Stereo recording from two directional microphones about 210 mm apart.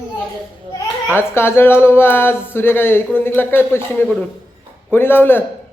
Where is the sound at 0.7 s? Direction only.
10° left (ahead or behind).